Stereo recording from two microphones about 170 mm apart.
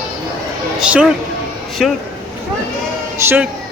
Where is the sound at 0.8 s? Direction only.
5° right (ahead or behind).